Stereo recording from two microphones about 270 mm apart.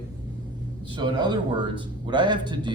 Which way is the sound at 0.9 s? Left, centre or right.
Centre.